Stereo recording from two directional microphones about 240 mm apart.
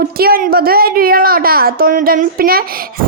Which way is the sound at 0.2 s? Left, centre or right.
Right.